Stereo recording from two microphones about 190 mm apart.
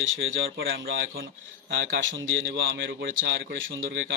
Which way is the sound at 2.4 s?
75° right (ahead or behind).